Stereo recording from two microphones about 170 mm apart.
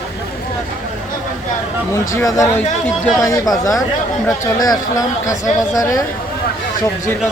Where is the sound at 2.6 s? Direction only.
5° left (ahead or behind).